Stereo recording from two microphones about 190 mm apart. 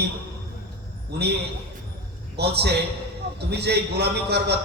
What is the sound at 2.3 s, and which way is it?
A man's voice, 60° right (ahead or behind).